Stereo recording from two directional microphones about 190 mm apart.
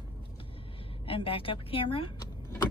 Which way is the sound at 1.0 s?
30° left (ahead or behind).